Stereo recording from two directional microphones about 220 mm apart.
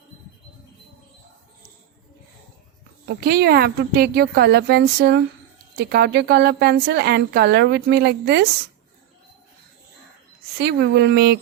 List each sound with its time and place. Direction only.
3.1 s speech: 45° right (ahead or behind)
10.6 s speech: 45° right (ahead or behind)